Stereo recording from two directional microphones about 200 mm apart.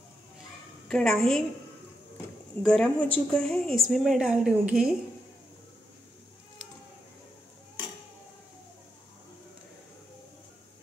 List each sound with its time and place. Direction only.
0.8 s a woman's voice: 5° left (ahead or behind)
2.6 s a woman's voice: 5° left (ahead or behind)